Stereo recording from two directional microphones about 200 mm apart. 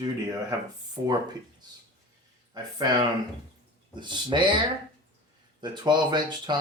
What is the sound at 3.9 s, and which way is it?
Speech, 25° right (ahead or behind).